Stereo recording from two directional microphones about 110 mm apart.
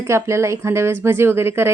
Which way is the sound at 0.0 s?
25° right (ahead or behind).